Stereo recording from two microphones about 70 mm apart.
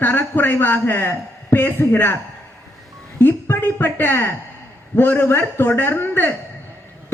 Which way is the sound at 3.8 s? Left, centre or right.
Left.